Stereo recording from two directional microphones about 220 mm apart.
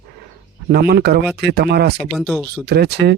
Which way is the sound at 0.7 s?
45° right (ahead or behind).